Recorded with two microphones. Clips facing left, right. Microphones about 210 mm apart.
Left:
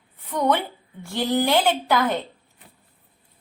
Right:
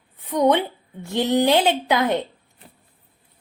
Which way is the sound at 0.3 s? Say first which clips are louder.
Right 4 dB; 15° right (ahead or behind).